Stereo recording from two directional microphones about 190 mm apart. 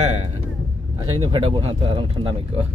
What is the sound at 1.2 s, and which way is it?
Speech, 30° right (ahead or behind).